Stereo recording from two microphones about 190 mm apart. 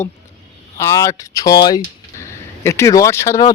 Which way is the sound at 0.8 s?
15° left (ahead or behind).